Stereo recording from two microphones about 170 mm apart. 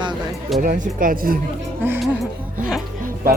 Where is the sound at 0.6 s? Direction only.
50° right (ahead or behind).